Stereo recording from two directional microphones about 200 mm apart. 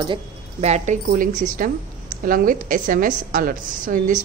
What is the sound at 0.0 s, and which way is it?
A woman's voice, 30° right (ahead or behind).